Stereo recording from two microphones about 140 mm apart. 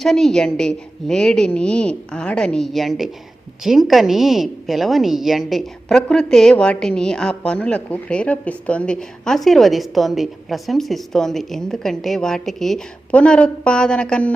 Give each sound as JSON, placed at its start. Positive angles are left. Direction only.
{"t": 0.0, "sound": "a woman's voice", "side_deg": 0}